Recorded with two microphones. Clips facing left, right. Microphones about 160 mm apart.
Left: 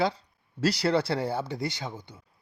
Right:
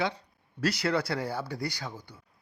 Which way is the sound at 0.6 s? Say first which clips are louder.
Left 3 dB; 30° left (ahead or behind).